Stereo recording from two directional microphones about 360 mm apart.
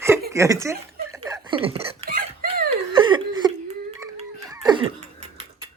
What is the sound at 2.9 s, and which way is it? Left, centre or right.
Chuckle, centre.